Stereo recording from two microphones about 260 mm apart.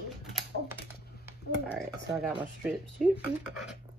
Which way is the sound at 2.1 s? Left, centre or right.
Centre.